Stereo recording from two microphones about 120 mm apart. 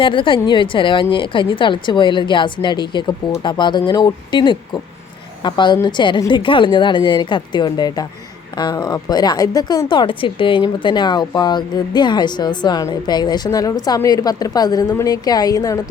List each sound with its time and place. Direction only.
0.0 s a woman's voice: 45° left (ahead or behind)